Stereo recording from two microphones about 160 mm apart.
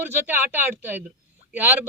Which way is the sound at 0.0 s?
10° right (ahead or behind).